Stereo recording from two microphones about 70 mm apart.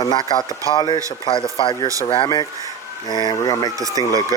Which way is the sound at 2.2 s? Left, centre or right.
Left.